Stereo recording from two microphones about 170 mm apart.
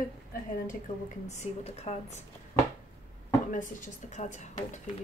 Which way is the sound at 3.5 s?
50° left (ahead or behind).